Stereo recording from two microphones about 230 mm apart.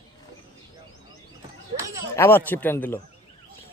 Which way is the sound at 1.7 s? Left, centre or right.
Right.